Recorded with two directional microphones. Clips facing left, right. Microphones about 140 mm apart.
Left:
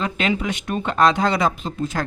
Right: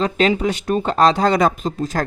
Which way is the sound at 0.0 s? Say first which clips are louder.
Right 5 dB; 35° right (ahead or behind).